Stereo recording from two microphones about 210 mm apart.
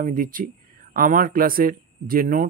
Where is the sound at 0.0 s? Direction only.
40° right (ahead or behind).